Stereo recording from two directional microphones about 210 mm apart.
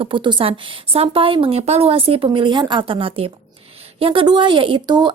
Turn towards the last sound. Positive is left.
turn(degrees=-20)  # may be behind; listen again after turning